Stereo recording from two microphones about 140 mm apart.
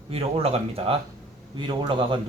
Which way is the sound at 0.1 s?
45° right (ahead or behind).